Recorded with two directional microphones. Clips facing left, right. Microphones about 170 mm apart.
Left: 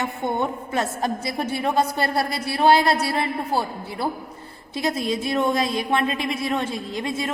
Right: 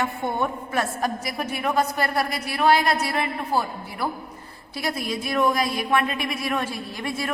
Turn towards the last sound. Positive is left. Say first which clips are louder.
# left 3 dB
turn(degrees=20)  # may be behind; listen again after turning